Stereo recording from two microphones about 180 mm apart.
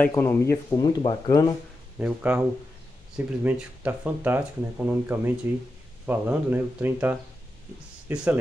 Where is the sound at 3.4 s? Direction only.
10° right (ahead or behind).